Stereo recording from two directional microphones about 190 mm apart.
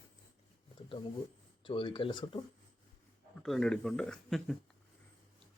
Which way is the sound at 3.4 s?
Centre (ahead or behind).